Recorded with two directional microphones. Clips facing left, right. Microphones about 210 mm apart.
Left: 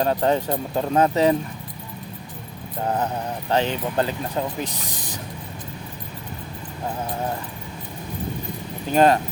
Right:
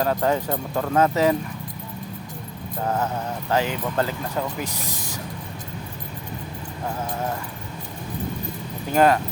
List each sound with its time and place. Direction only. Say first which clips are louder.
0.0 s speech: left 1 dB; 25° left (ahead or behind)
2.8 s speech: left 1 dB; 15° left (ahead or behind)
8.9 s speech: left 1 dB; 25° left (ahead or behind)